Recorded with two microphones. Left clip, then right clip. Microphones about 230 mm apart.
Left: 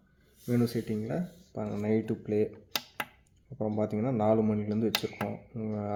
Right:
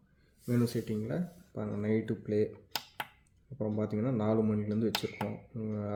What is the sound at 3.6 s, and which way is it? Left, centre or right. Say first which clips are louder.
Speech: left 3 dB; centre.